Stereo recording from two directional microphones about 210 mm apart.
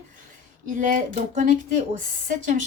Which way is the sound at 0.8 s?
35° right (ahead or behind).